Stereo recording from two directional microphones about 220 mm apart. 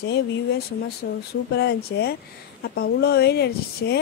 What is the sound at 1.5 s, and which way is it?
Speech, 45° left (ahead or behind).